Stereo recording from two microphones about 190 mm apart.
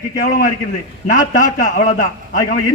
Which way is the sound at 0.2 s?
45° left (ahead or behind).